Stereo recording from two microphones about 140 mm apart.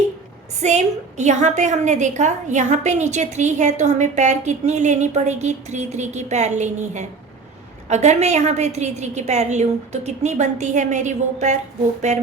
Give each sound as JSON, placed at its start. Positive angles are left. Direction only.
{"t": 0.6, "sound": "a woman's voice", "side_deg": -55}